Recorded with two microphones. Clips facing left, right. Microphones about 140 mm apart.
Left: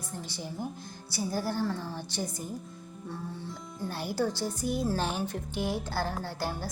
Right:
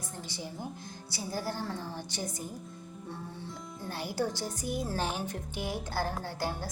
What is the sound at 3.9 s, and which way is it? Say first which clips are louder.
A woman's voice: left 2 dB; 15° right (ahead or behind).